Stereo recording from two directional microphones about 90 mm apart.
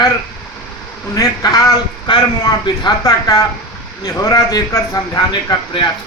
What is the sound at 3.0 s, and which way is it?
Speech, 40° left (ahead or behind).